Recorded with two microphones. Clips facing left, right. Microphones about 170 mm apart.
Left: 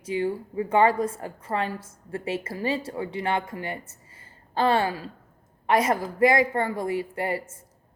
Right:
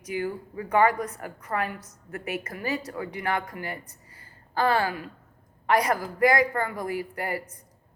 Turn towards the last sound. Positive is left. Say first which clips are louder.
# left 3 dB
turn(degrees=25)  # may be behind; listen again after turning